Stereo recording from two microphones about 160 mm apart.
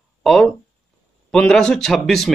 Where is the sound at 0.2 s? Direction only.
Centre (ahead or behind).